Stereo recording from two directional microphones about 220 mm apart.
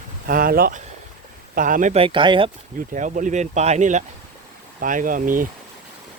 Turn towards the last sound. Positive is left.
turn(degrees=-35)  # may be behind; listen again after turning